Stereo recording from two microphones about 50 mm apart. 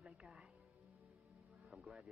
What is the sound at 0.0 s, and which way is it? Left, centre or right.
Music, centre.